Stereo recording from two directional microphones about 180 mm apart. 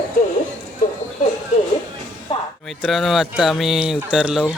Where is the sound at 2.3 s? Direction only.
30° left (ahead or behind).